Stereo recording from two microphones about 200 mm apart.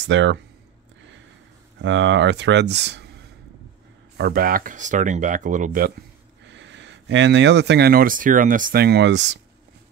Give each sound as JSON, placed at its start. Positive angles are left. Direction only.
{"t": 0.0, "sound": "speech", "side_deg": -65}
{"t": 1.8, "sound": "speech", "side_deg": -65}
{"t": 4.2, "sound": "speech", "side_deg": -45}
{"t": 6.4, "sound": "speech", "side_deg": -65}